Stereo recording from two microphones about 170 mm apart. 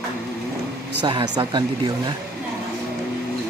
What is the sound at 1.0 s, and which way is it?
Speech, 25° right (ahead or behind).